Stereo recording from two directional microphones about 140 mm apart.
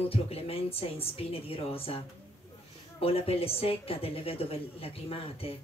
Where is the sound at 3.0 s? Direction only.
45° left (ahead or behind).